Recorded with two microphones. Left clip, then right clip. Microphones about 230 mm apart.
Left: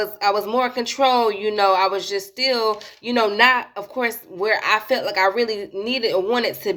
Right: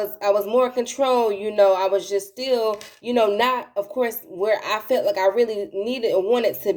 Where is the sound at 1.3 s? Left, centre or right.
Centre.